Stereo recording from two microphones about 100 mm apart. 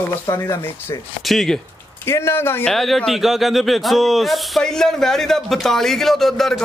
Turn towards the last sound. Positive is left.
turn(degrees=5)  # may be behind; listen again after turning